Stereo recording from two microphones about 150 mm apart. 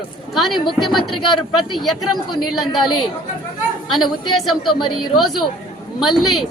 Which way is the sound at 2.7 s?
30° left (ahead or behind).